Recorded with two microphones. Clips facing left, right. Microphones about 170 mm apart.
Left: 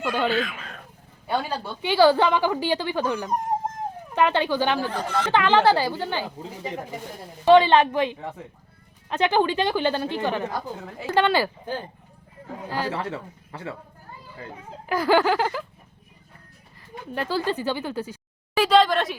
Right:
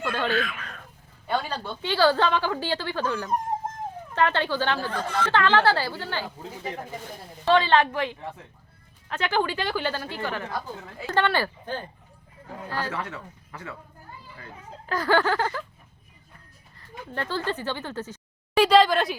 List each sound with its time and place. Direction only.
0.0 s speech: 15° left (ahead or behind)
12.9 s speech: 30° left (ahead or behind)
14.8 s speech: 10° left (ahead or behind)
17.1 s speech: 10° left (ahead or behind)
18.5 s a woman's voice: centre (ahead or behind)